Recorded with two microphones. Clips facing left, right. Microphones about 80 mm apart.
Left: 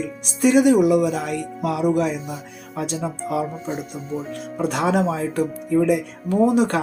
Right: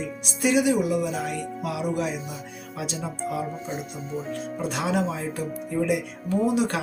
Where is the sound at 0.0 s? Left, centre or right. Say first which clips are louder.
Left 6 dB; left.